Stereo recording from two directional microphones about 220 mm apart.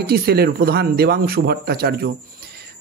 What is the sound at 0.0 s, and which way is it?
Speech, 45° right (ahead or behind).